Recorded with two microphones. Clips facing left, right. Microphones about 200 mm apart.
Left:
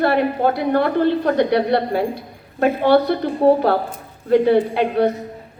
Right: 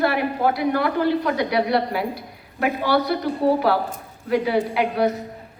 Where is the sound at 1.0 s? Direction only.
30° left (ahead or behind).